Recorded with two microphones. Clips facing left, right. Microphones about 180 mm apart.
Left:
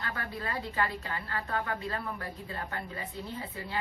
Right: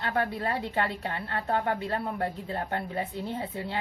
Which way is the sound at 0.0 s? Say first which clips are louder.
Right 8 dB; 70° right (ahead or behind).